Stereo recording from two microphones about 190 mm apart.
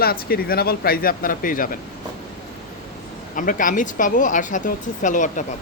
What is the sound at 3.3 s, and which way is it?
Speech, 45° left (ahead or behind).